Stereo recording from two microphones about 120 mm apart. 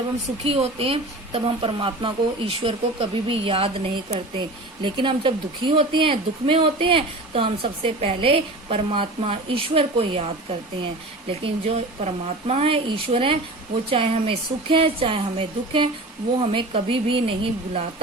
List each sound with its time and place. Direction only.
0.4 s speech: 50° right (ahead or behind)
11.3 s speech: 55° right (ahead or behind)